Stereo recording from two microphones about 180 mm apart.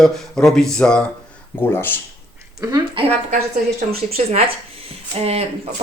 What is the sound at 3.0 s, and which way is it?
Speech, 30° right (ahead or behind).